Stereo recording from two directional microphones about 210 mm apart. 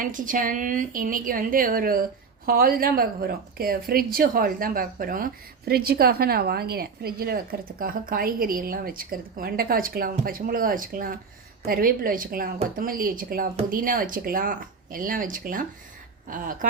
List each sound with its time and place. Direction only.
0.0 s a woman's voice: 40° right (ahead or behind)